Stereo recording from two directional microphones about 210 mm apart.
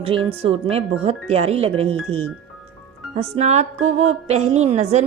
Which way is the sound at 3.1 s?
30° right (ahead or behind).